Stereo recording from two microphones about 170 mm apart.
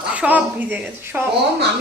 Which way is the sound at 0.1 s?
10° right (ahead or behind).